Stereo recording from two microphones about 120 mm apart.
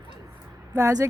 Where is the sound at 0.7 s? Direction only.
25° right (ahead or behind).